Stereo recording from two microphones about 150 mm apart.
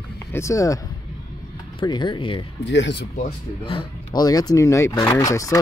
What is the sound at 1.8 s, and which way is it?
Speech, 30° left (ahead or behind).